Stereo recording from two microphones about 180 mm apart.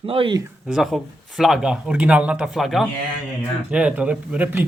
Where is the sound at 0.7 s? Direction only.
Centre (ahead or behind).